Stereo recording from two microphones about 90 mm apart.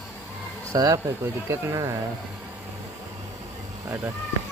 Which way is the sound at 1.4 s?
35° right (ahead or behind).